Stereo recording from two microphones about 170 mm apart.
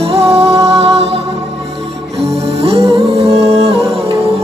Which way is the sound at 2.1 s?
40° right (ahead or behind).